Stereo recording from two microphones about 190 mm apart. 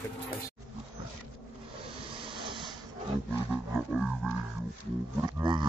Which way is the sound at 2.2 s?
25° right (ahead or behind).